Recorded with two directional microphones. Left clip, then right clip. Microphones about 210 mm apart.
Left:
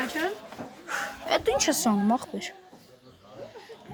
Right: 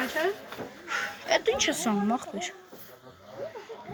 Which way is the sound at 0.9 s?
20° left (ahead or behind).